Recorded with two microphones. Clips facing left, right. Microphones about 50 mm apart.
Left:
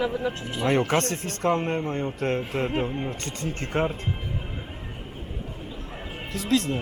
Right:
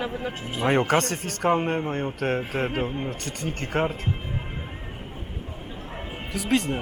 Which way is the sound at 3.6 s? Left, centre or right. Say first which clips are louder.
Right 1 dB; centre.